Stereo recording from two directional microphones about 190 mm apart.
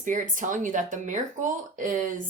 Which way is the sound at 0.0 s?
40° right (ahead or behind).